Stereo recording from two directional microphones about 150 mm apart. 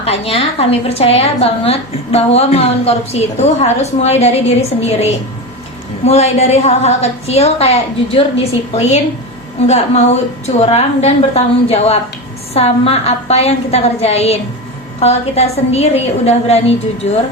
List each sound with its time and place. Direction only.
0.0 s a woman's voice: 40° left (ahead or behind)
6.1 s a woman's voice: 45° left (ahead or behind)